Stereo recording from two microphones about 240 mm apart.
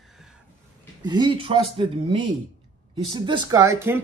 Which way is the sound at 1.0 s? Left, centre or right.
Centre.